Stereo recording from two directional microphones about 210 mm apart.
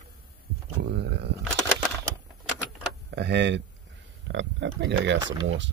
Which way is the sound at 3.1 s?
55° right (ahead or behind).